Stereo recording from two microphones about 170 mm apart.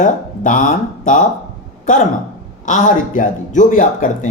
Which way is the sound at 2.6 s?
45° left (ahead or behind).